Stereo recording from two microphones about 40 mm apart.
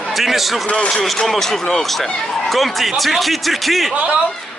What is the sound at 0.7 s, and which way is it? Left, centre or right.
Speech, left.